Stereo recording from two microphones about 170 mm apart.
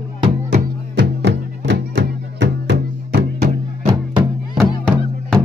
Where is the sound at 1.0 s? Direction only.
90° right.